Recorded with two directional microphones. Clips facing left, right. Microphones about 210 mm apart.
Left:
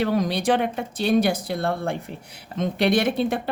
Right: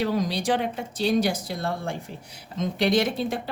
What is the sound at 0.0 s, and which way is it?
Speech, 60° left (ahead or behind).